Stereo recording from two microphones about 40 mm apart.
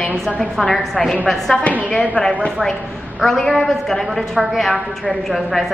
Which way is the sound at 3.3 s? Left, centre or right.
Centre.